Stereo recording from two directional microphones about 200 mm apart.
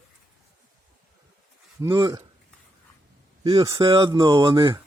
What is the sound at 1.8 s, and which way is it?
Speech, 20° right (ahead or behind).